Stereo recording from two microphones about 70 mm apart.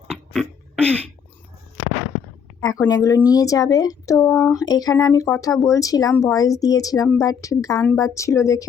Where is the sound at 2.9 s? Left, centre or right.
Left.